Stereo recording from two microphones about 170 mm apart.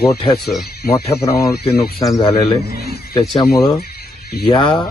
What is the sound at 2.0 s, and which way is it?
Speech, 25° left (ahead or behind).